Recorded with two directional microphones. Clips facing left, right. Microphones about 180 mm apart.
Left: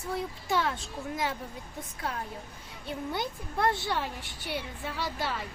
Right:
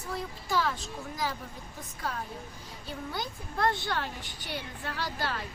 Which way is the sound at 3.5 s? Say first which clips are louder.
Left 1 dB; 5° left (ahead or behind).